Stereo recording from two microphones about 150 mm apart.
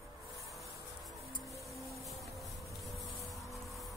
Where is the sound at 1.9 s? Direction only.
Centre (ahead or behind).